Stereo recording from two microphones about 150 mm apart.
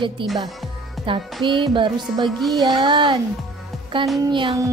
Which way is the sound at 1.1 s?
35° right (ahead or behind).